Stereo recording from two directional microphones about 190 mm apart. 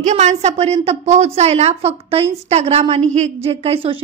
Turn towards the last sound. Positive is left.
turn(degrees=-30)  # may be behind; listen again after turning